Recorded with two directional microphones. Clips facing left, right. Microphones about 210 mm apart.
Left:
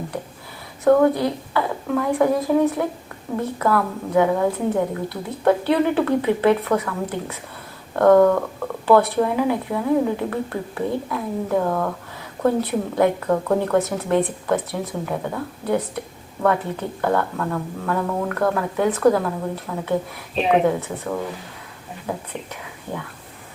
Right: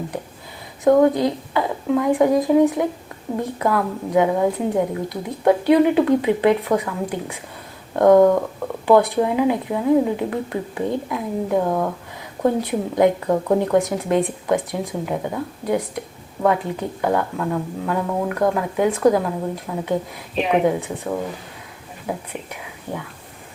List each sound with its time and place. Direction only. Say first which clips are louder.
0.9 s a woman's voice: right 1 dB; 20° right (ahead or behind)